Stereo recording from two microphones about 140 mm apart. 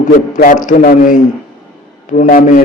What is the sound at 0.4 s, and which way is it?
A man's voice, 65° left (ahead or behind).